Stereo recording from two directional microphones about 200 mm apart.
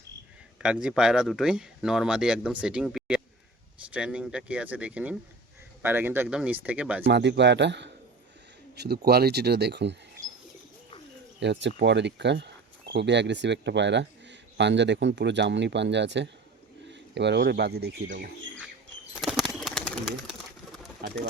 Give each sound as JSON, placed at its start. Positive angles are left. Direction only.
{"t": 0.6, "sound": "speech", "side_deg": -5}
{"t": 7.1, "sound": "speech", "side_deg": -60}
{"t": 11.3, "sound": "speech", "side_deg": -60}
{"t": 19.2, "sound": "bird", "side_deg": 0}
{"t": 21.0, "sound": "speech", "side_deg": -50}